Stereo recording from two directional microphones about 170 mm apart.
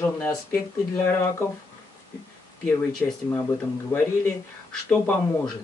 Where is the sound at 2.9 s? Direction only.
5° left (ahead or behind).